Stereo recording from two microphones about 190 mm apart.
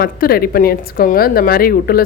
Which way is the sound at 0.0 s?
50° left (ahead or behind).